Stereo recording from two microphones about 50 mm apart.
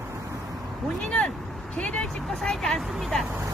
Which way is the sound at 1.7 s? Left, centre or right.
Left.